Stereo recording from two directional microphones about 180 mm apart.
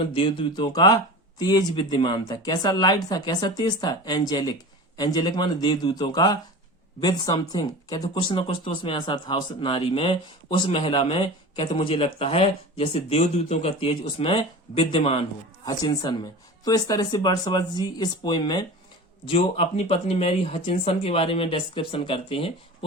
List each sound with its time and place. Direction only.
0.1 s speech: 25° left (ahead or behind)
19.2 s speech: 35° left (ahead or behind)